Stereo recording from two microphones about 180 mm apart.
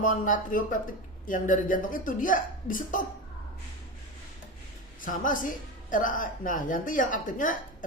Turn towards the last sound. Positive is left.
turn(degrees=45)  # may be behind; listen again after turning